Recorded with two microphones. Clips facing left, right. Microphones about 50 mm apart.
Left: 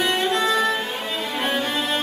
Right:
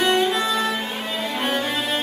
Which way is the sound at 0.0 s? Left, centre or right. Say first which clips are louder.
Right 1 dB; centre.